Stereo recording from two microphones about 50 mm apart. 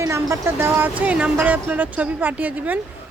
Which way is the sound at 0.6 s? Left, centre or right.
Right.